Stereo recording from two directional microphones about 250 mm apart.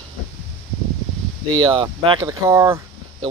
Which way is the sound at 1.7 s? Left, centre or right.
Centre.